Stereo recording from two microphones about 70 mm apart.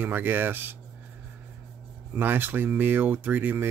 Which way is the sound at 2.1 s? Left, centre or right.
Right.